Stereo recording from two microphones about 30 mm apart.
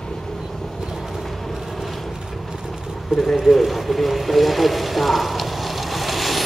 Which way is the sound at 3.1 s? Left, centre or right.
Right.